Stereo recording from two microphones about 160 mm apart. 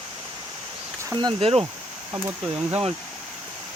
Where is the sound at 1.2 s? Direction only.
35° right (ahead or behind).